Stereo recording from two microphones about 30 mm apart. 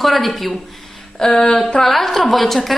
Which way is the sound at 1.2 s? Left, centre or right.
Left.